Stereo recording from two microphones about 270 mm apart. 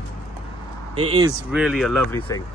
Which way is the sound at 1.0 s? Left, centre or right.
Centre.